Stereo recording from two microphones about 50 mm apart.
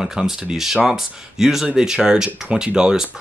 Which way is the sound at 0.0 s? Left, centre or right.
Centre.